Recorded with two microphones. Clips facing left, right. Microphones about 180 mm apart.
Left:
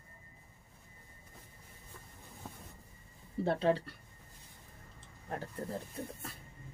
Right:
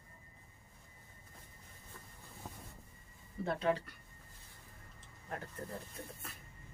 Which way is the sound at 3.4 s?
30° left (ahead or behind).